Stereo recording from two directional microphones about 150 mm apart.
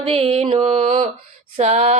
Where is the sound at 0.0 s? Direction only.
40° right (ahead or behind).